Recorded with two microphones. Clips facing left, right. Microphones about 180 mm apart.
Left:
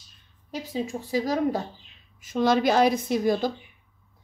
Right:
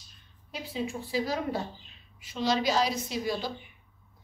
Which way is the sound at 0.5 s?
40° left (ahead or behind).